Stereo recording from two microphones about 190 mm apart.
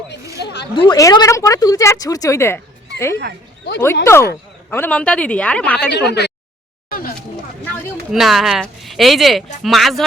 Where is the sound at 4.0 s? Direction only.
15° left (ahead or behind).